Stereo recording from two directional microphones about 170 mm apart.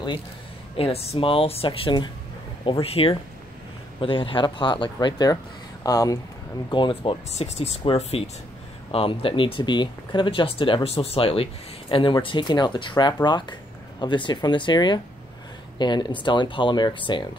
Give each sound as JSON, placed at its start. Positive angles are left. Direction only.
{"t": 0.7, "sound": "speech", "side_deg": 35}